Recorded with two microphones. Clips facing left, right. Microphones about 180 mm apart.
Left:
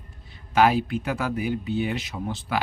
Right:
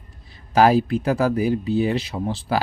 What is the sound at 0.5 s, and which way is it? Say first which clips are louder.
Speech: right 4 dB; 35° right (ahead or behind).